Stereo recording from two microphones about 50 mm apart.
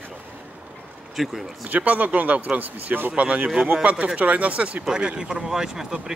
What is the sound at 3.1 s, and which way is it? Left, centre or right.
Speech, right.